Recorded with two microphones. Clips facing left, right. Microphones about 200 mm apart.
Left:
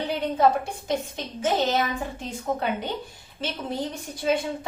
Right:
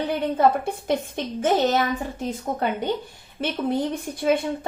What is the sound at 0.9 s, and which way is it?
Speech, 55° right (ahead or behind).